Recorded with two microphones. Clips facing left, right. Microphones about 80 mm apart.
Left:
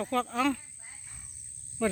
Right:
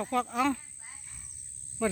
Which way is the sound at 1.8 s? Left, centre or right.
Centre.